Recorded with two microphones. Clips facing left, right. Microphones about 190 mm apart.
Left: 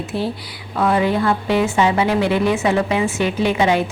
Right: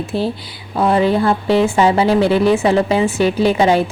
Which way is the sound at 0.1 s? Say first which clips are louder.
Right 3 dB; 30° right (ahead or behind).